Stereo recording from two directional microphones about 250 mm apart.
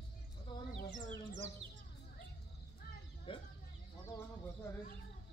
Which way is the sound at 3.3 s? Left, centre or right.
Left.